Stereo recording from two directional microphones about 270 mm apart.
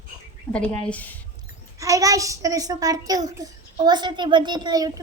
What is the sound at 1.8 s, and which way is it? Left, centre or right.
A child's voice, centre.